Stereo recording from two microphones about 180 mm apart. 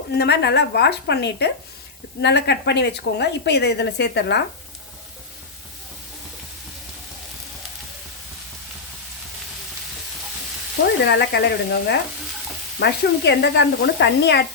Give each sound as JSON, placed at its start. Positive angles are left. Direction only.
{"t": 0.2, "sound": "a woman's voice", "side_deg": 65}
{"t": 11.0, "sound": "a woman's voice", "side_deg": 70}